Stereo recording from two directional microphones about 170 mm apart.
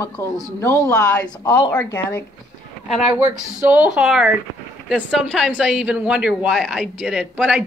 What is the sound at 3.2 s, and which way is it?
Speech, 45° right (ahead or behind).